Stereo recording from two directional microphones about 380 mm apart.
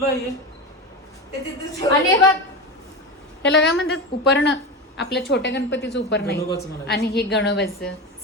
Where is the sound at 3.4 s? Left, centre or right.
Left.